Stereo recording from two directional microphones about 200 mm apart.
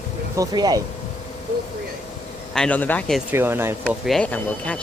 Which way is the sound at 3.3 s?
10° right (ahead or behind).